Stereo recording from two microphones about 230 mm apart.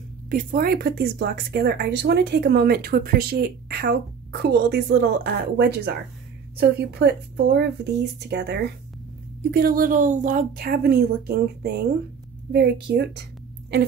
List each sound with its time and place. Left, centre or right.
0.3 s a woman's voice: right